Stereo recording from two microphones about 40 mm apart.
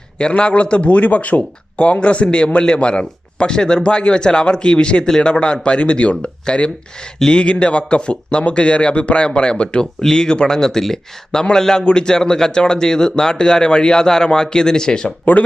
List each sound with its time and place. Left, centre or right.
0.2 s a man's voice: left
15.2 s speech: left